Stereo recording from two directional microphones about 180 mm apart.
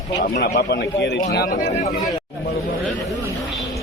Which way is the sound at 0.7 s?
70° left (ahead or behind).